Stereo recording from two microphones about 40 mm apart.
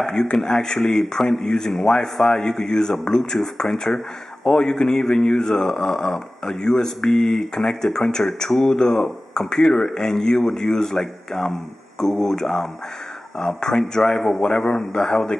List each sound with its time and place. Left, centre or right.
0.0 s speech: centre
1.4 s speech: left